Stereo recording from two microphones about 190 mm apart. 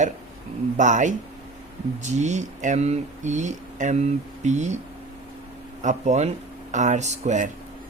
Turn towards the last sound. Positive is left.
turn(degrees=-40)  # may be behind; listen again after turning